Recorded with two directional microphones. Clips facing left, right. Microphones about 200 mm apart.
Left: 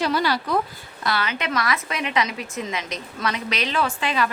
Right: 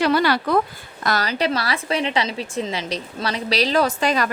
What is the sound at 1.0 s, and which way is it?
A woman's voice, 40° right (ahead or behind).